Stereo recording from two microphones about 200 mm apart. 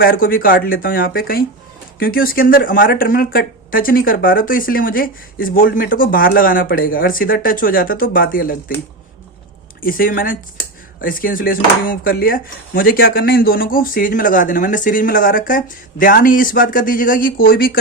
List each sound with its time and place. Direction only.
0.0 s speech: 45° left (ahead or behind)
9.8 s speech: 45° left (ahead or behind)